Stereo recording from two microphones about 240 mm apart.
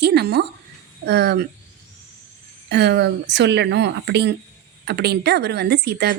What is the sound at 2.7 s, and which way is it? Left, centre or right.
Speech, right.